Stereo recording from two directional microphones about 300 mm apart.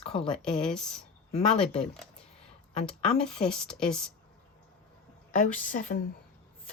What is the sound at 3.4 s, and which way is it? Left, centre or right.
Speech, centre.